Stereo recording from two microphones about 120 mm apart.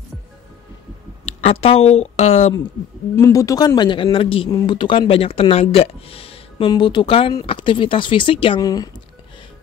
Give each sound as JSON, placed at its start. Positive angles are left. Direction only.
{"t": 1.4, "sound": "speech", "side_deg": 50}
{"t": 3.2, "sound": "speech", "side_deg": 25}
{"t": 8.5, "sound": "speech", "side_deg": 30}